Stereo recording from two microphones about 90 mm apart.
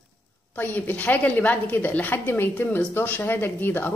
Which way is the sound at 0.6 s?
20° left (ahead or behind).